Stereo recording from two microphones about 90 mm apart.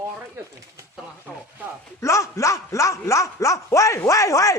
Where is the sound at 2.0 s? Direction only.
35° left (ahead or behind).